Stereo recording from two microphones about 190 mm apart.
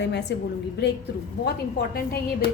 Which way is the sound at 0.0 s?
65° left (ahead or behind).